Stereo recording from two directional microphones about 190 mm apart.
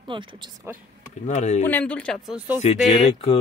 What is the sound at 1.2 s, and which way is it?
Speech, 35° left (ahead or behind).